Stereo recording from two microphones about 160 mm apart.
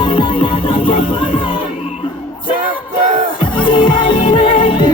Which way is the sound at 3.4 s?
30° left (ahead or behind).